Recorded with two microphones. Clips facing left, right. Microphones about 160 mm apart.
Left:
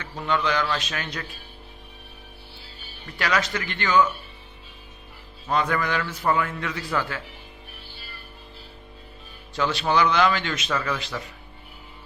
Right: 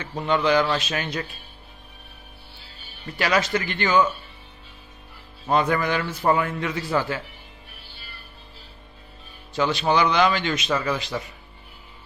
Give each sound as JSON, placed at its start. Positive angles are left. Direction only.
{"t": 0.0, "sound": "a man's voice", "side_deg": -25}
{"t": 3.2, "sound": "a man's voice", "side_deg": -25}
{"t": 5.5, "sound": "a man's voice", "side_deg": -25}
{"t": 9.6, "sound": "a man's voice", "side_deg": -15}